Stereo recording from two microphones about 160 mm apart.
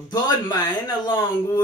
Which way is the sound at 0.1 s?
25° left (ahead or behind).